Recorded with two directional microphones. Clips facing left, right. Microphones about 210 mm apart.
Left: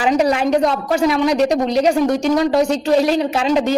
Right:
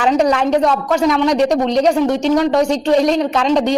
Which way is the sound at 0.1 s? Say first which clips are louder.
Right 1 dB; 10° left (ahead or behind).